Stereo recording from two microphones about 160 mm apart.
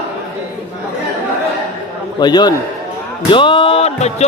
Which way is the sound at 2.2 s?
25° left (ahead or behind).